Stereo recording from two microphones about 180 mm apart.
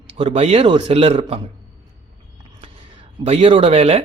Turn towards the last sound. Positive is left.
turn(degrees=-35)  # may be behind; listen again after turning